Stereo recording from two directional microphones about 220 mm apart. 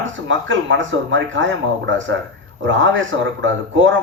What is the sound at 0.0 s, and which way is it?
A man's voice, 60° right (ahead or behind).